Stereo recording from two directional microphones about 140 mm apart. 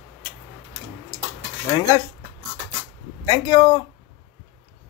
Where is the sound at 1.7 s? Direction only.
25° left (ahead or behind).